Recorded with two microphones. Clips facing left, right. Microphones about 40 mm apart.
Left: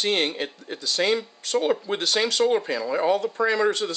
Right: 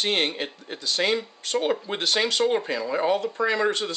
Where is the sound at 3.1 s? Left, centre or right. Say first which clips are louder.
Left 3 dB; right.